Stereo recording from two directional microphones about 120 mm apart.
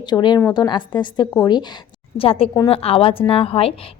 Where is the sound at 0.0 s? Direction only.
40° left (ahead or behind).